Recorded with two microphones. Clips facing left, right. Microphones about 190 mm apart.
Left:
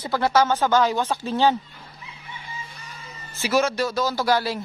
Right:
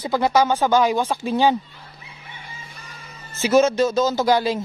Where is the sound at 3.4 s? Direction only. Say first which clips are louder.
Right 6 dB; 20° right (ahead or behind).